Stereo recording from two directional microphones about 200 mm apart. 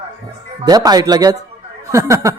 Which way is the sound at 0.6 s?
20° right (ahead or behind).